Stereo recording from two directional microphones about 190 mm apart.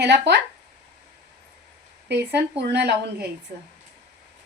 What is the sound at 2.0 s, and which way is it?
Speech, 60° right (ahead or behind).